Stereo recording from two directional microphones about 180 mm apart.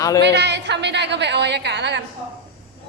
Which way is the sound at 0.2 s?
70° right (ahead or behind).